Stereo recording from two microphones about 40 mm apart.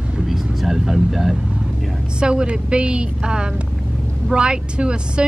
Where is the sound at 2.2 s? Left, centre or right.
Right.